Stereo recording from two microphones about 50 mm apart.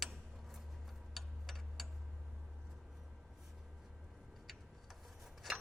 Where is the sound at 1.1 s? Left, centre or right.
Centre.